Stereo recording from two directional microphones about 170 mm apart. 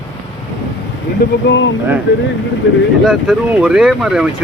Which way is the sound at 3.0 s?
5° right (ahead or behind).